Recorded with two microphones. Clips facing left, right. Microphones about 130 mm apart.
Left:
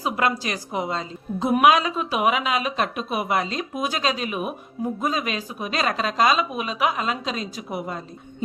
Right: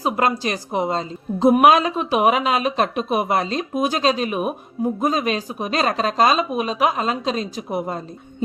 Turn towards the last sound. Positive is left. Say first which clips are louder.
# right 5 dB
turn(degrees=-40)  # may be behind; listen again after turning